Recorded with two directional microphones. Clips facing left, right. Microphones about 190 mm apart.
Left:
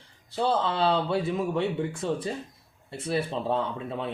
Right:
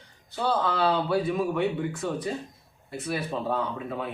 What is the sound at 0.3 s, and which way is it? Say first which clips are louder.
Speech: left 1 dB; 25° left (ahead or behind).